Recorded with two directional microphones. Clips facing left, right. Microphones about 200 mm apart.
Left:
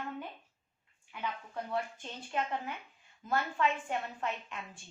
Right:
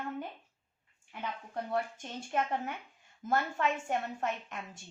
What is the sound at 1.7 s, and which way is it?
A woman's voice, 45° right (ahead or behind).